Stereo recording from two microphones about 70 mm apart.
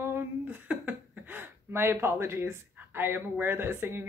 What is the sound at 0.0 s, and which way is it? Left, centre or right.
Speech, right.